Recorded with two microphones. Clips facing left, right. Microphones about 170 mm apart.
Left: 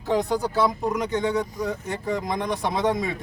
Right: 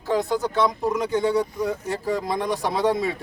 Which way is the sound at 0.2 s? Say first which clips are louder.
Right 1 dB; 15° left (ahead or behind).